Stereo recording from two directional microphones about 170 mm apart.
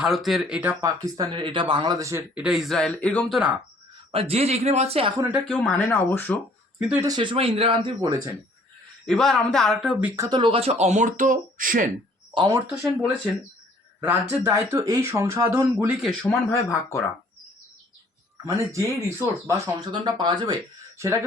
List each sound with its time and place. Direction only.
0.0 s speech: centre (ahead or behind)
0.8 s speech: 20° right (ahead or behind); by 3.6 s 5° right (ahead or behind)
4.1 s speech: 35° right (ahead or behind)
5.1 s speech: 15° right (ahead or behind)
5.5 s speech: 5° left (ahead or behind)
6.7 s speech: 10° right (ahead or behind)
7.1 s speech: 30° right (ahead or behind)
9.0 s speech: 5° left (ahead or behind)
10.2 s speech: 25° right (ahead or behind); by 11.9 s 55° right (ahead or behind)
12.3 s speech: 30° right (ahead or behind)
14.0 s speech: 15° right (ahead or behind)
16.0 s speech: centre (ahead or behind)
16.5 s speech: 15° left (ahead or behind)
18.4 s speech: 20° right (ahead or behind)